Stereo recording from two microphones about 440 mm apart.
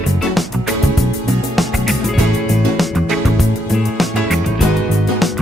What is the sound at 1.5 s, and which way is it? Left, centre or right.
Music, centre.